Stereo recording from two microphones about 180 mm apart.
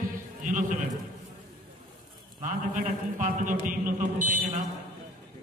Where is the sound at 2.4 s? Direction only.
45° right (ahead or behind).